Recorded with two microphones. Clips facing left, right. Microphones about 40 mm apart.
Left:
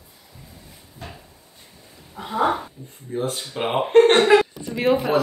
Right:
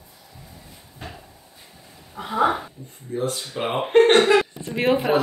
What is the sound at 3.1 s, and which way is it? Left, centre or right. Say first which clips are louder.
Speech: even; left.